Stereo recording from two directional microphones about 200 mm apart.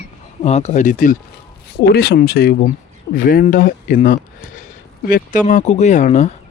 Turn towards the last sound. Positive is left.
turn(degrees=35)  # may be behind; listen again after turning